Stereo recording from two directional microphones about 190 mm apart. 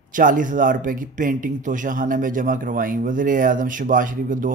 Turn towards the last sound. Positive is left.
turn(degrees=-45)  # may be behind; listen again after turning